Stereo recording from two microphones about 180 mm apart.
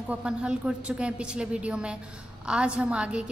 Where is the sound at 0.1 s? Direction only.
5° right (ahead or behind).